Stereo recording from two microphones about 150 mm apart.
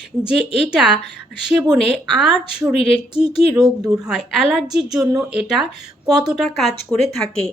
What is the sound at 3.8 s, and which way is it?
Speech, 25° right (ahead or behind).